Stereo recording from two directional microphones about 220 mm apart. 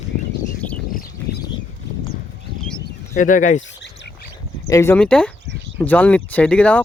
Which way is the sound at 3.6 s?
55° left (ahead or behind).